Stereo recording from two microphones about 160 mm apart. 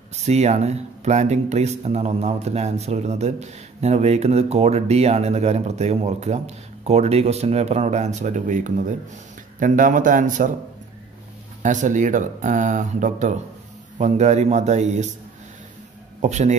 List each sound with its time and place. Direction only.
0.1 s speech: 45° right (ahead or behind)
11.6 s speech: 50° right (ahead or behind)
16.2 s speech: 45° right (ahead or behind)